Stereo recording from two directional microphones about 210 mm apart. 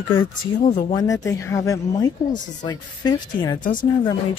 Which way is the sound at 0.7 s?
35° left (ahead or behind).